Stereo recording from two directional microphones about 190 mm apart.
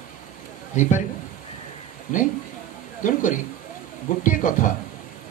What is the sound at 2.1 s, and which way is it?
Speech, 45° left (ahead or behind).